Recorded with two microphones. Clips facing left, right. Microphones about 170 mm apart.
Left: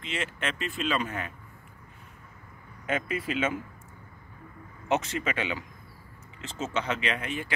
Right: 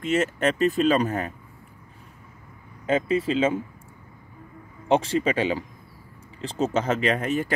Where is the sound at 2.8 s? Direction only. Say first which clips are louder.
Right 8 dB; 30° right (ahead or behind).